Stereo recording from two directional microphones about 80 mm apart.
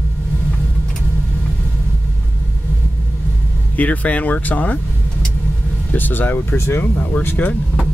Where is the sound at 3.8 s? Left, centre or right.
Centre.